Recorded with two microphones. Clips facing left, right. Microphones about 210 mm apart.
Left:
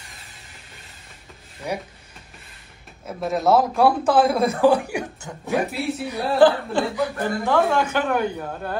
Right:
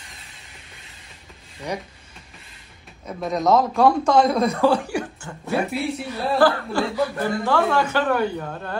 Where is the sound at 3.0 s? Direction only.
5° left (ahead or behind).